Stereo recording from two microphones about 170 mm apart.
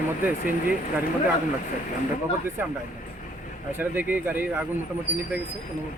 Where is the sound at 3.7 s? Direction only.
10° right (ahead or behind).